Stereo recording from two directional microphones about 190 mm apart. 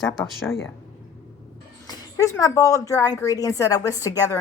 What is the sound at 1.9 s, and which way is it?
A woman's voice, 15° left (ahead or behind).